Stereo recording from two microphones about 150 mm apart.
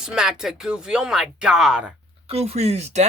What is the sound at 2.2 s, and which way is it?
Speech, 45° right (ahead or behind).